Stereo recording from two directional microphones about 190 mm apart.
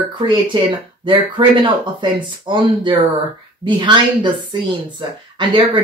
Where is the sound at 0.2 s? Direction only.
25° right (ahead or behind).